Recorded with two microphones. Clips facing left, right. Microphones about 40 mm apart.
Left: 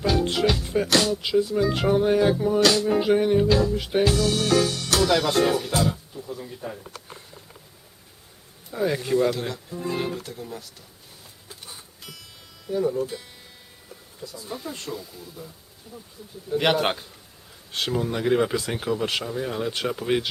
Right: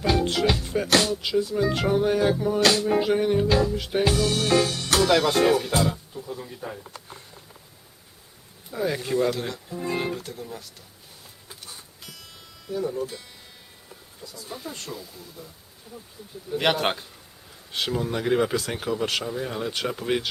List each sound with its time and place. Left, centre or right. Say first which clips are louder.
0.6 s music: left 2 dB; centre
0.9 s speech: even; centre
4.2 s music: even; centre
4.9 s speech: right 1 dB; centre
8.7 s speech: left 2 dB; centre
11.6 s music: left 1 dB; centre
12.6 s speech: left 4 dB; centre
14.4 s speech: left 2 dB; centre
16.5 s speech: left 2 dB; centre